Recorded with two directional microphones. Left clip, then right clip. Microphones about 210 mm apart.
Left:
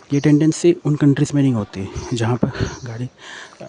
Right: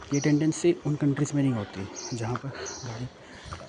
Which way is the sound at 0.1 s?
50° left (ahead or behind).